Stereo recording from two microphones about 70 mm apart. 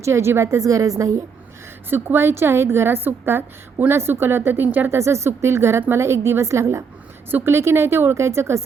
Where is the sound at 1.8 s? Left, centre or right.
Right.